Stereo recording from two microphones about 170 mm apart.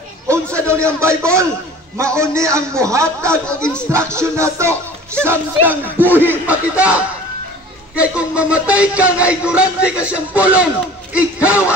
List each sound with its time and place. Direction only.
0.3 s a man's voice: 15° right (ahead or behind)
2.0 s music: 15° right (ahead or behind)
3.3 s speech: 5° left (ahead or behind)
3.9 s music: 15° right (ahead or behind)
8.0 s music: 5° right (ahead or behind)